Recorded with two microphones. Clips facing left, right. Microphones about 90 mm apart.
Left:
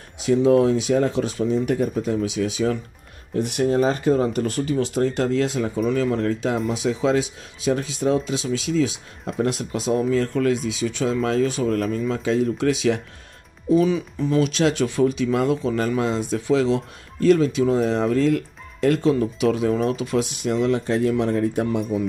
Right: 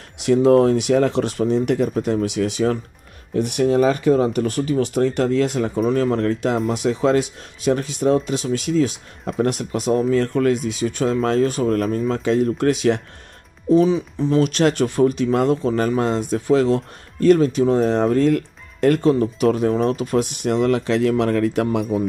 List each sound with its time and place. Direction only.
0.2 s speech: 60° right (ahead or behind)
13.7 s speech: 30° right (ahead or behind)
14.4 s speech: 55° right (ahead or behind); by 21.8 s 80° right